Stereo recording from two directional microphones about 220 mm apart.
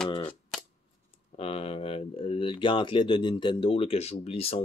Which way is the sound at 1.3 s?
25° left (ahead or behind).